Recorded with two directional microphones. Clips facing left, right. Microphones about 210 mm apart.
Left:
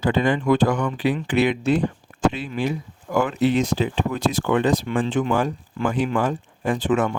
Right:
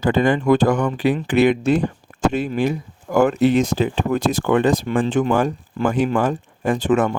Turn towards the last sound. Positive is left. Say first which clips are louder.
# right 3 dB
turn(degrees=-45)  # may be behind; listen again after turning